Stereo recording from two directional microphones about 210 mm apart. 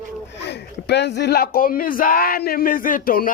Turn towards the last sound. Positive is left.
turn(degrees=45)  # may be behind; listen again after turning